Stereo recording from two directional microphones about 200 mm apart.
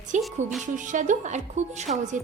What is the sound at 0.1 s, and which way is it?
Speech, 35° right (ahead or behind).